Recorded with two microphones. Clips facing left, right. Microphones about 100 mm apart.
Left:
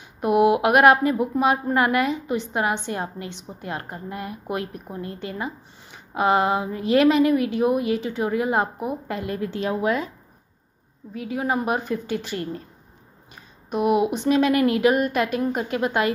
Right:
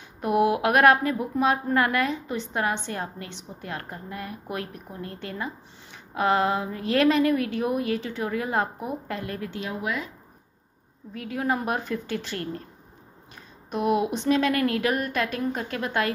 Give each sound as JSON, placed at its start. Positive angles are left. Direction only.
{"t": 0.2, "sound": "a woman's voice", "side_deg": 15}
{"t": 9.4, "sound": "a woman's voice", "side_deg": 35}
{"t": 11.1, "sound": "a woman's voice", "side_deg": 5}
{"t": 13.7, "sound": "a woman's voice", "side_deg": 10}